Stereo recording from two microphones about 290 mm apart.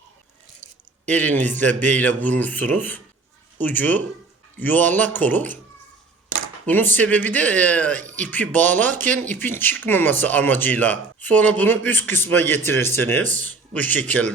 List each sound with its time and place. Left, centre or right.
0.6 s squish: right
1.0 s speech: centre
6.7 s speech: centre